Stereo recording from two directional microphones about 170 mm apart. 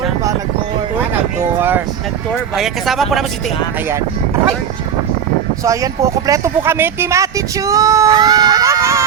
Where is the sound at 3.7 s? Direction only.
15° right (ahead or behind).